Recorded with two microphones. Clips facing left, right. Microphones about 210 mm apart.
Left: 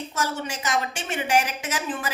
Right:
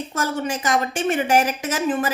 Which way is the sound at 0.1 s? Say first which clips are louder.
Right 6 dB; 50° right (ahead or behind).